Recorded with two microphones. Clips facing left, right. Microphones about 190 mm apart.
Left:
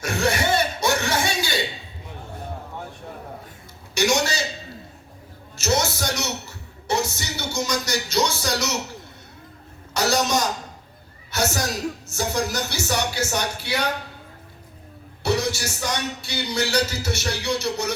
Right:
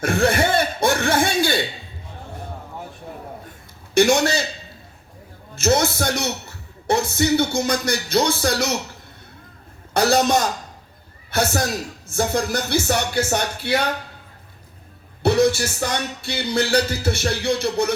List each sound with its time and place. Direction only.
0.0 s a sound: 55° right (ahead or behind)
3.9 s music: 55° right (ahead or behind)
5.5 s speech: 55° right (ahead or behind)
9.9 s music: 55° right (ahead or behind)
15.2 s music: 55° right (ahead or behind)